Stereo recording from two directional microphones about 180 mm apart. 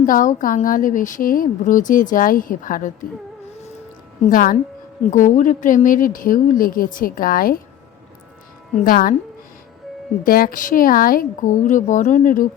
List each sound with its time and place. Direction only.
0.0 s a woman's voice: 50° left (ahead or behind)
4.3 s a woman's voice: 50° left (ahead or behind)
8.7 s a woman's voice: 50° left (ahead or behind)
10.2 s a woman's voice: 55° left (ahead or behind)